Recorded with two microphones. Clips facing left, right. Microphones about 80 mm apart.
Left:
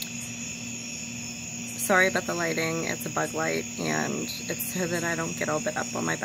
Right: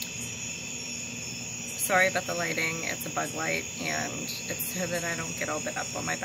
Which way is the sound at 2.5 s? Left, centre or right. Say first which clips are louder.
Left 4 dB; left.